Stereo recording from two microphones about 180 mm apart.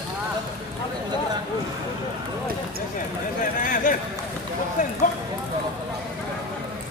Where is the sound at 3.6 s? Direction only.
45° left (ahead or behind).